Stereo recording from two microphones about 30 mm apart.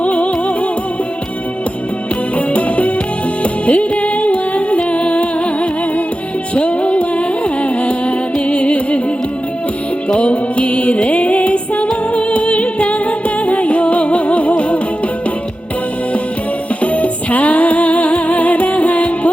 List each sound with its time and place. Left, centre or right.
0.0 s music: left
2.5 s music: left
10.1 s music: left
16.8 s music: left